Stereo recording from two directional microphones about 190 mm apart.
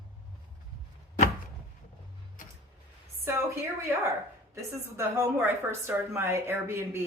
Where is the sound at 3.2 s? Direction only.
15° right (ahead or behind).